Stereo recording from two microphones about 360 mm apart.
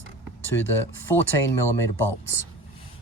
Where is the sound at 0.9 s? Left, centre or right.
Centre.